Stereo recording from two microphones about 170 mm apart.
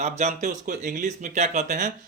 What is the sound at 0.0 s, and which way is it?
Speech, 40° right (ahead or behind).